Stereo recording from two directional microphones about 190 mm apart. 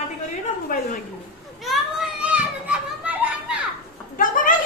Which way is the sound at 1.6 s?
Centre (ahead or behind).